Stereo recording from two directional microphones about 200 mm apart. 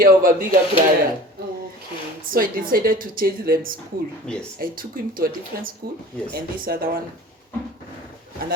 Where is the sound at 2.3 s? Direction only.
45° right (ahead or behind).